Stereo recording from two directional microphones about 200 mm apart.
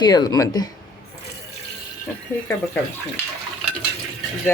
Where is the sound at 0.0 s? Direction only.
20° left (ahead or behind).